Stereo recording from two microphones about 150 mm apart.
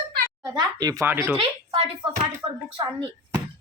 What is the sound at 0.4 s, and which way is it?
Speech, 25° right (ahead or behind).